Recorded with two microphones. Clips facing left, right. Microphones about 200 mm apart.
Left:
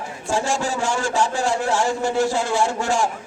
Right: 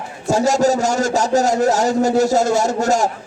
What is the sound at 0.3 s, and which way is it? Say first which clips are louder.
A man's voice: right 8 dB; 40° right (ahead or behind).